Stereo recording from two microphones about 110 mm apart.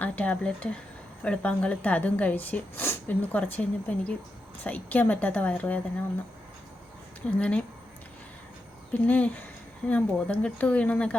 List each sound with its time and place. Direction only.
0.0 s a woman's voice: 15° left (ahead or behind)
7.3 s a woman's voice: 10° left (ahead or behind)
8.9 s a woman's voice: 15° left (ahead or behind)